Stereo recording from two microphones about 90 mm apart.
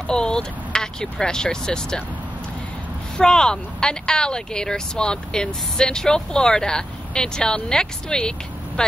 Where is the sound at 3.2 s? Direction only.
10° left (ahead or behind).